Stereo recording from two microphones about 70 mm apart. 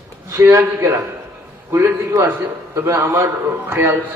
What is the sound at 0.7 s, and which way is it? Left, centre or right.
A man's voice, right.